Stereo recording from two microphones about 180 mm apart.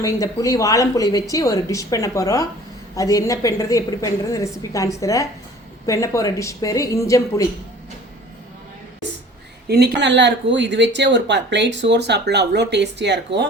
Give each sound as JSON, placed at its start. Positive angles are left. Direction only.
{"t": 0.0, "sound": "a woman's voice", "side_deg": 20}
{"t": 9.6, "sound": "speech", "side_deg": -60}